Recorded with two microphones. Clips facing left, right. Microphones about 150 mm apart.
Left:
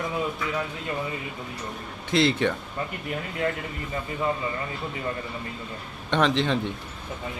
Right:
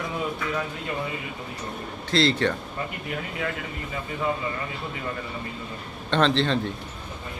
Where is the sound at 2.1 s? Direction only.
20° left (ahead or behind).